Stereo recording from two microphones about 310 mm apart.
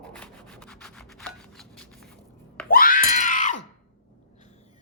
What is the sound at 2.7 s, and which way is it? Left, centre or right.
Screaming, left.